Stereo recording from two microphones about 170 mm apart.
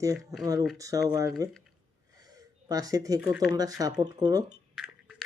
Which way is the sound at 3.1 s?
5° right (ahead or behind).